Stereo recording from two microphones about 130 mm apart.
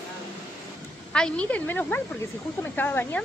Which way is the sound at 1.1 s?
5° left (ahead or behind).